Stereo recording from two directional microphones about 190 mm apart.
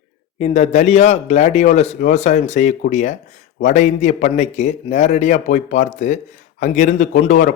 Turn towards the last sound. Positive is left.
turn(degrees=40)  # may be behind; listen again after turning